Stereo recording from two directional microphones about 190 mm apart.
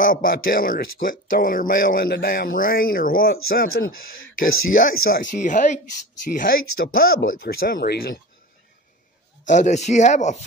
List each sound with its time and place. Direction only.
0.0 s speech: 45° left (ahead or behind)
9.5 s speech: 40° left (ahead or behind)